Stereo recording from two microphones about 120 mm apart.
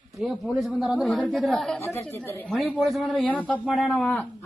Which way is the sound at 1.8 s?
20° left (ahead or behind).